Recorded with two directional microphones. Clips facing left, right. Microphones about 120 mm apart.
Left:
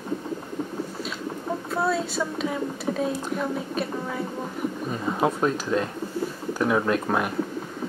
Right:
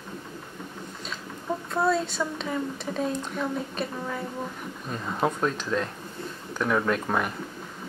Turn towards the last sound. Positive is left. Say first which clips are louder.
# left 2 dB
turn(degrees=5)  # may be behind; listen again after turning